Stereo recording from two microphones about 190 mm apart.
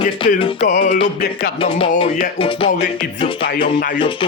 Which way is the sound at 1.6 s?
30° left (ahead or behind).